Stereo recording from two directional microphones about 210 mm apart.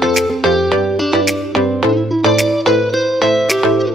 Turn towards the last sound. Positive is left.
turn(degrees=0)  # may be behind; listen again after turning